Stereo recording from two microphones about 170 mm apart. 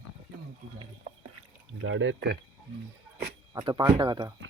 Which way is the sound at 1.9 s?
90° right.